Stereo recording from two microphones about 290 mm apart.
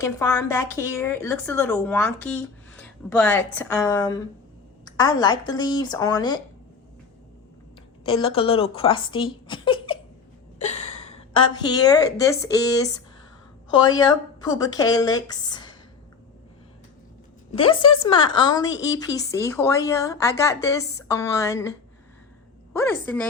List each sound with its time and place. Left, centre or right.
0.0 s a woman's voice: centre
8.0 s a woman's voice: centre
17.5 s a woman's voice: centre
22.9 s a woman's voice: centre